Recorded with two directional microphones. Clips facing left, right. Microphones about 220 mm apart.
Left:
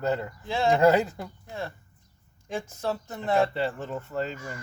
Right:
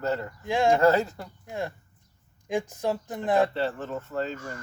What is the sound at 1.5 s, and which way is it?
Speech, 15° right (ahead or behind).